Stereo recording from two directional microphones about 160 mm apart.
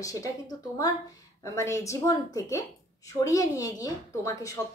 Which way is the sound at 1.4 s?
20° left (ahead or behind).